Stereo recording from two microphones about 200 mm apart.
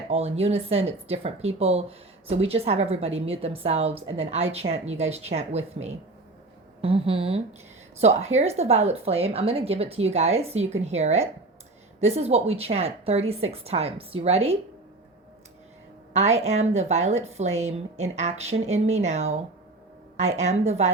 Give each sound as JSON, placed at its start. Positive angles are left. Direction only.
{"t": 0.1, "sound": "a woman's voice", "side_deg": -30}
{"t": 16.1, "sound": "a woman's voice", "side_deg": -35}